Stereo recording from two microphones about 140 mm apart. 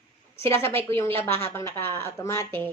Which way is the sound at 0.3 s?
20° left (ahead or behind).